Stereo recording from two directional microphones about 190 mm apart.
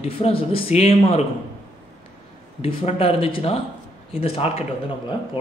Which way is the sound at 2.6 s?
30° left (ahead or behind).